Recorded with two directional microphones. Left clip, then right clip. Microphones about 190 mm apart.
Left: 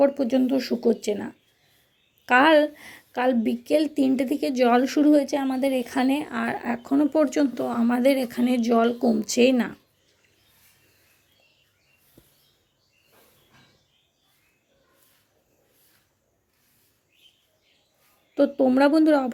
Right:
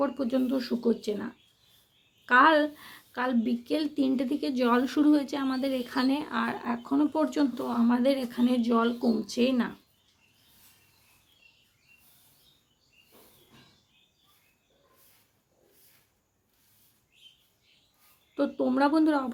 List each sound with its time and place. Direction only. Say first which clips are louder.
0.0 s a woman's voice: left 8 dB; 15° left (ahead or behind)
18.3 s a woman's voice: left 7 dB; 20° left (ahead or behind)